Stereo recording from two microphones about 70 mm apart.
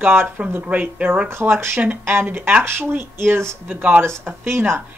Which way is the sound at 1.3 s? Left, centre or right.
Right.